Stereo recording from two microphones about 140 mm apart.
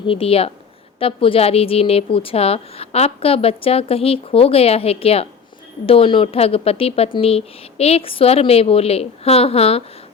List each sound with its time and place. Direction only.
0.0 s a woman's voice: 40° left (ahead or behind)